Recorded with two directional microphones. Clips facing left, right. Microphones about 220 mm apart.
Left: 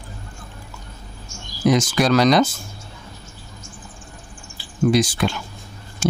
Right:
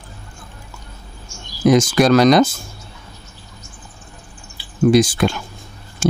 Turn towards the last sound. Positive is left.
turn(degrees=-50)  # may be behind; listen again after turning